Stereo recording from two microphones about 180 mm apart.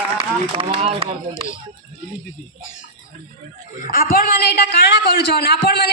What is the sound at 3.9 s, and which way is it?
A woman's voice, 50° left (ahead or behind).